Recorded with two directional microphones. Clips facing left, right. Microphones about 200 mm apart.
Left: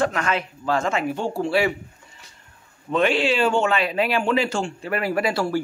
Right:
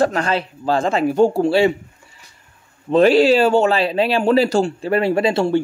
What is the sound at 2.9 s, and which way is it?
Speech, 35° right (ahead or behind).